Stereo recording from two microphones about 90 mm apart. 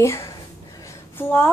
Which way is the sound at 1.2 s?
25° left (ahead or behind).